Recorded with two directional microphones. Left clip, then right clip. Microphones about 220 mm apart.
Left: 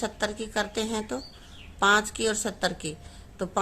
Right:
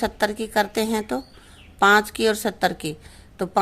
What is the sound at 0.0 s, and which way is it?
Speech, 35° right (ahead or behind).